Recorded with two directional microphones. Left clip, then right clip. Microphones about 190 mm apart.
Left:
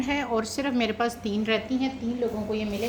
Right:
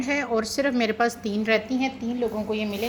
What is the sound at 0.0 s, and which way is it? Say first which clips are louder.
A woman's voice: right 2 dB; 15° right (ahead or behind).